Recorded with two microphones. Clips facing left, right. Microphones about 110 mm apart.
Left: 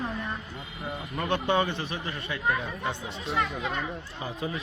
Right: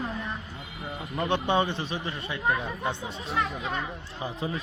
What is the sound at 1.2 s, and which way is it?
A man's voice, 25° right (ahead or behind).